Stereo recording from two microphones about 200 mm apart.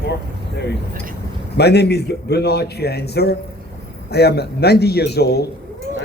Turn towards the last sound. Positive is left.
turn(degrees=55)  # may be behind; listen again after turning